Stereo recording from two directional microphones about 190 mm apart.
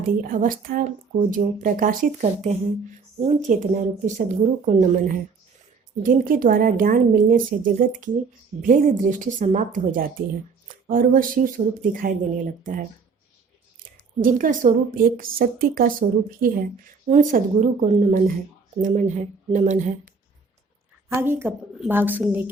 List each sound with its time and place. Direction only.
0.2 s a woman's voice: 45° right (ahead or behind)
14.2 s a woman's voice: 45° right (ahead or behind)
21.1 s a woman's voice: 15° right (ahead or behind)